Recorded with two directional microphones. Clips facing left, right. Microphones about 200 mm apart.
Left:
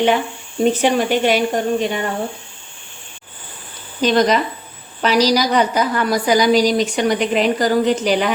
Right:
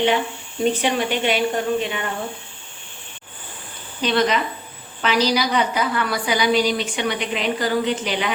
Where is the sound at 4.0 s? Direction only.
40° left (ahead or behind).